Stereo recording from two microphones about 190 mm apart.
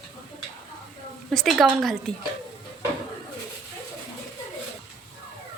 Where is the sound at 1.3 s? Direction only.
Centre (ahead or behind).